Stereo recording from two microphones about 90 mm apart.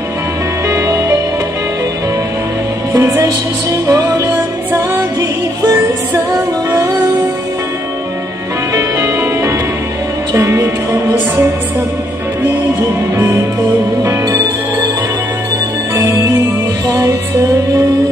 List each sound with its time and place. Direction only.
0.7 s music: 35° right (ahead or behind)
2.9 s music: 25° right (ahead or behind)
3.7 s music: 40° right (ahead or behind)
8.7 s music: 35° right (ahead or behind)
15.9 s music: 35° right (ahead or behind)